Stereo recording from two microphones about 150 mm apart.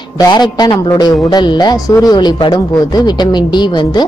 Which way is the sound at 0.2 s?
30° left (ahead or behind).